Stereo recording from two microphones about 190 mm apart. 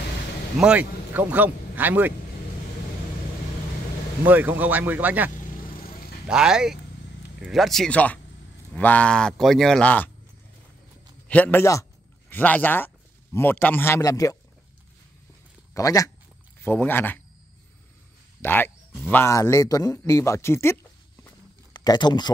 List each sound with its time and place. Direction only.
0.6 s speech: 5° right (ahead or behind)
4.3 s speech: 10° right (ahead or behind); by 10.1 s 10° left (ahead or behind)
11.2 s a man's voice: 5° left (ahead or behind)
15.7 s a man's voice: 20° left (ahead or behind)
18.4 s a man's voice: 10° left (ahead or behind)
21.7 s speech: 20° left (ahead or behind)